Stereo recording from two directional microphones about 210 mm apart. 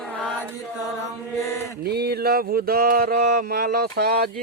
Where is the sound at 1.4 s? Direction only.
15° left (ahead or behind).